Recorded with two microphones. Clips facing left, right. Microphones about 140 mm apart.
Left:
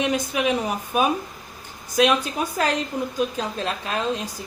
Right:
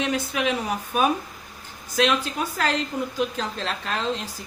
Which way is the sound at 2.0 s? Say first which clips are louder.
Left 3 dB; 15° left (ahead or behind).